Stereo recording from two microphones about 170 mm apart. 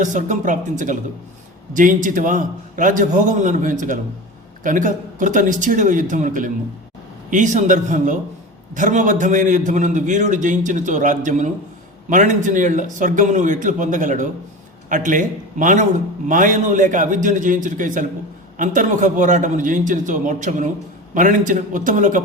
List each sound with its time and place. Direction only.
0.0 s a man's voice: 45° right (ahead or behind)